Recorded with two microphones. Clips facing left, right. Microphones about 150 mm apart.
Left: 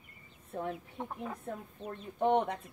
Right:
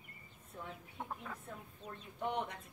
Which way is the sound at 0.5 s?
55° left (ahead or behind).